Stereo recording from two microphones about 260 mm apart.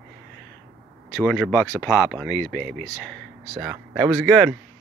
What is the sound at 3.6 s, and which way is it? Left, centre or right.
Speech, centre.